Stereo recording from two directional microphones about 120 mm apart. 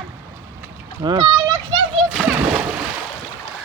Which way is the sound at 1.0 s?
40° right (ahead or behind).